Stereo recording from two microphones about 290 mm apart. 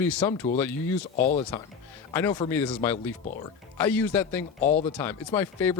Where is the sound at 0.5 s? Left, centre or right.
Centre.